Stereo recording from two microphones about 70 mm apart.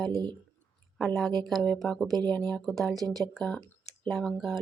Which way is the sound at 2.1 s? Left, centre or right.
Right.